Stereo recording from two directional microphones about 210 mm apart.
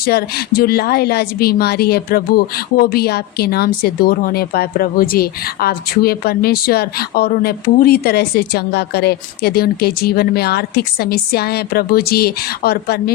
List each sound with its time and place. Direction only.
0.0 s a woman's voice: 45° left (ahead or behind)